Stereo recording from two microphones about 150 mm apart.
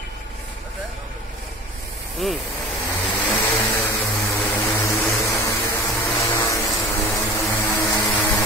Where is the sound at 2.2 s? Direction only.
Centre (ahead or behind).